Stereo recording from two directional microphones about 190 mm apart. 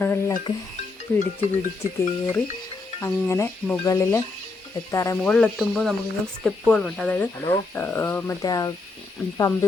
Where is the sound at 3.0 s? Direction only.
15° left (ahead or behind).